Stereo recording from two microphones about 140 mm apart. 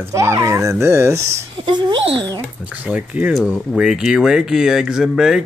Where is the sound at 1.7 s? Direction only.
35° right (ahead or behind).